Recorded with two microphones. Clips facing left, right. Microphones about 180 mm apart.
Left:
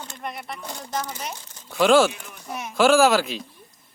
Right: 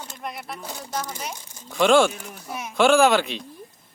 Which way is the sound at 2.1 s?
40° right (ahead or behind).